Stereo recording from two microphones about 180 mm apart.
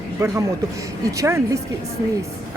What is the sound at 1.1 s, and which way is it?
Speech, 15° right (ahead or behind).